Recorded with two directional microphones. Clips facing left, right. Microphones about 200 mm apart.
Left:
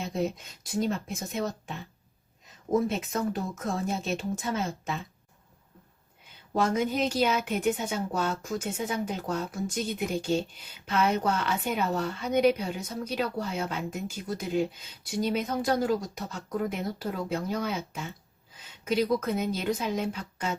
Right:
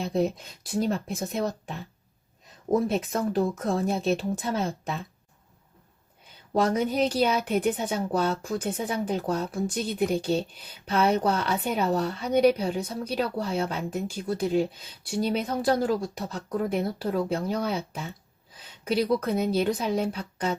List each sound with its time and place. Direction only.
0.0 s speech: 35° right (ahead or behind)
2.8 s speech: 35° right (ahead or behind)
6.5 s speech: 35° right (ahead or behind)